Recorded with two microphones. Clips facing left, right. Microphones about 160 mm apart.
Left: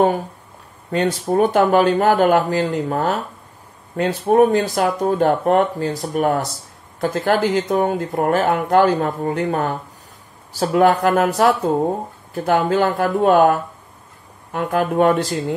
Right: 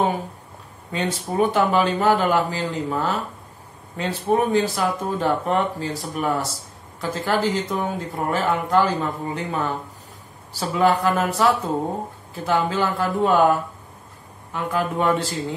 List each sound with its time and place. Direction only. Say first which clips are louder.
0.9 s speech: left 5 dB; 50° left (ahead or behind)
12.4 s speech: left 5 dB; 50° left (ahead or behind)
14.5 s speech: left 5 dB; 55° left (ahead or behind)